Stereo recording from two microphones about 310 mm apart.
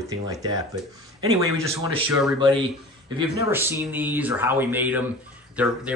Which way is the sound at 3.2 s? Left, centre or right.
Centre.